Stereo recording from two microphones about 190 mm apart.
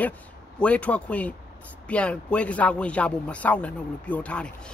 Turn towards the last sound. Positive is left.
turn(degrees=5)  # may be behind; listen again after turning